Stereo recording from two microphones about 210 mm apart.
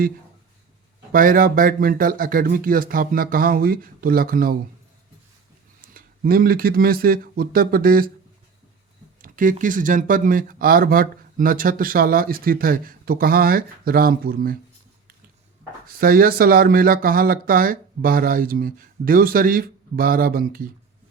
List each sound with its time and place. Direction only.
1.1 s speech: 40° right (ahead or behind)
5.9 s speech: 45° right (ahead or behind)
9.2 s speech: 40° right (ahead or behind)
15.9 s speech: 45° right (ahead or behind)